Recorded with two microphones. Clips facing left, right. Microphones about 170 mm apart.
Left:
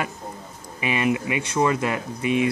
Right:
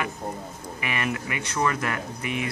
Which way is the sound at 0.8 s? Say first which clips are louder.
Left 7 dB; 20° left (ahead or behind).